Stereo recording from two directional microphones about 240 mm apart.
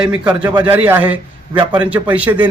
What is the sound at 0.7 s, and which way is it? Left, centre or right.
A man's voice, centre.